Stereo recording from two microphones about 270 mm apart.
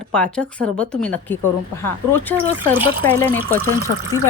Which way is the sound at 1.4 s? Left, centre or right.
Left.